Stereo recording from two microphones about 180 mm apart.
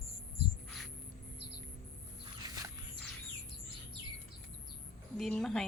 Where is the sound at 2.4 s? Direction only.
20° right (ahead or behind).